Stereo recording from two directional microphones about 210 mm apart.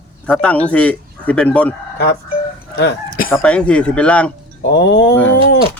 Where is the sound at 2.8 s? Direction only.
55° left (ahead or behind).